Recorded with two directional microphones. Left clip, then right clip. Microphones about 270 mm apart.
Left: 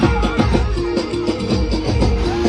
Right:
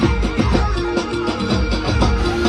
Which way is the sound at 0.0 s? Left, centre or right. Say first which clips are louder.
Left 2 dB; centre.